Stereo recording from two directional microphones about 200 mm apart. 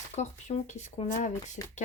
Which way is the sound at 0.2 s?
35° left (ahead or behind).